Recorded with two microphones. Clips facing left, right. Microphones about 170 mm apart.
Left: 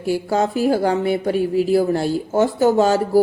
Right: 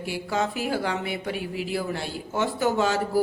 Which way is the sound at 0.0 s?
40° left (ahead or behind).